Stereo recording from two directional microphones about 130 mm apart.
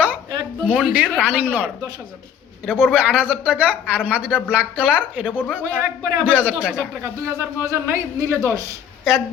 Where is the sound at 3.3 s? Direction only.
10° right (ahead or behind).